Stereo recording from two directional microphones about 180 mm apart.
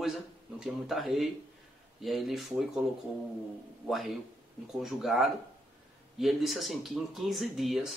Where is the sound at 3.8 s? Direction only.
Centre (ahead or behind).